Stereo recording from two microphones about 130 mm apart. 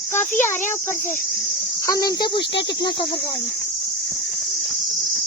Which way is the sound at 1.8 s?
30° left (ahead or behind).